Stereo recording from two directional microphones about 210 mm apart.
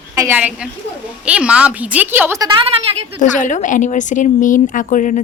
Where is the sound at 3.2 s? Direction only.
35° left (ahead or behind).